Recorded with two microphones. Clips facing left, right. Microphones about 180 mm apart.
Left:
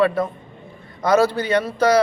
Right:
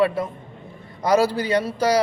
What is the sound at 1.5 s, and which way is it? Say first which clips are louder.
Speech: left 3 dB; 10° right (ahead or behind).